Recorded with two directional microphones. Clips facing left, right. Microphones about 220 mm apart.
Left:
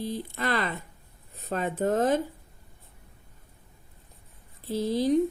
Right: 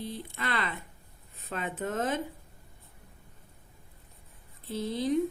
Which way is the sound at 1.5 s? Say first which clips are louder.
Left 7 dB; 40° left (ahead or behind).